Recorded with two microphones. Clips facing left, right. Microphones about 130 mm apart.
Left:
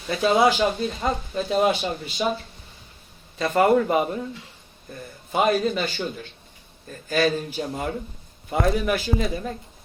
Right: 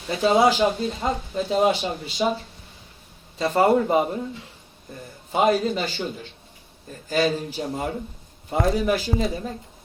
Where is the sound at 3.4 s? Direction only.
25° right (ahead or behind).